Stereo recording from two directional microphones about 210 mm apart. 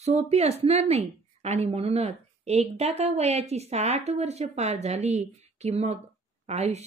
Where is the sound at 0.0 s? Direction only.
30° right (ahead or behind).